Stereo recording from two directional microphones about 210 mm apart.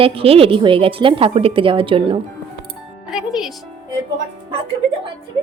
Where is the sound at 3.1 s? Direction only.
Centre (ahead or behind).